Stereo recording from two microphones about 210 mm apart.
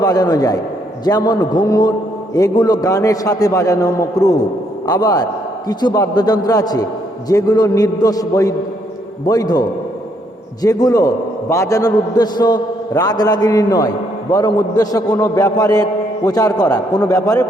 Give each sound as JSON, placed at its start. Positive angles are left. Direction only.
{"t": 0.0, "sound": "a man's voice", "side_deg": 20}